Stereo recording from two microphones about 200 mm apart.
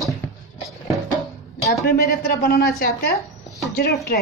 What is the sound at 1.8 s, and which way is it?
A woman's voice, 50° left (ahead or behind).